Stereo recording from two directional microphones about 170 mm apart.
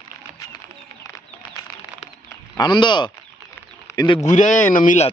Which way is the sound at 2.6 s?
25° left (ahead or behind).